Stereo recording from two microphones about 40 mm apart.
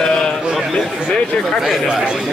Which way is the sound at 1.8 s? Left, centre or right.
Right.